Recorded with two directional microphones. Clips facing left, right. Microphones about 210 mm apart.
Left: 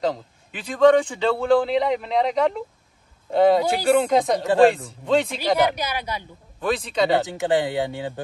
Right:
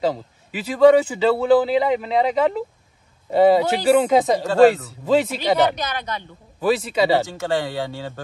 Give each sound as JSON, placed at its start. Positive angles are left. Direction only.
{"t": 0.0, "sound": "a man's voice", "side_deg": -5}
{"t": 5.6, "sound": "speech", "side_deg": 10}
{"t": 6.6, "sound": "a man's voice", "side_deg": -5}
{"t": 7.2, "sound": "speech", "side_deg": 15}